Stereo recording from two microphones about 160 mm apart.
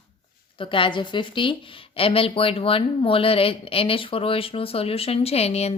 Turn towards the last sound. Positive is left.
turn(degrees=40)  # may be behind; listen again after turning